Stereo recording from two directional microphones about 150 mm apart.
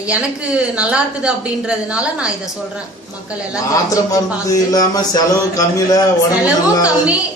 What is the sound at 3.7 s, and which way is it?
Speech, 20° left (ahead or behind).